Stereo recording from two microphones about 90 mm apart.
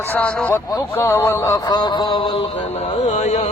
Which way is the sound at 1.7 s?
55° left (ahead or behind).